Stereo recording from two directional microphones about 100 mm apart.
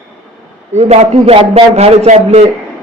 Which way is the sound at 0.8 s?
85° right.